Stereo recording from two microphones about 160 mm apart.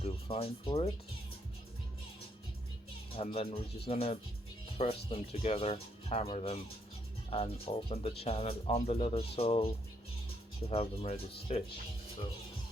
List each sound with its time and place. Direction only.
0.0 s speech: 35° left (ahead or behind)
3.2 s speech: 35° left (ahead or behind)